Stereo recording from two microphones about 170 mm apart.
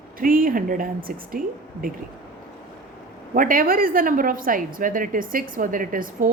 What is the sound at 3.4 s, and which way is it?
A woman's voice, 55° right (ahead or behind).